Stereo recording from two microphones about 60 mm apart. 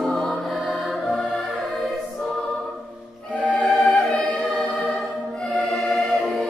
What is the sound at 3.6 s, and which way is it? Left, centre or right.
Choir, centre.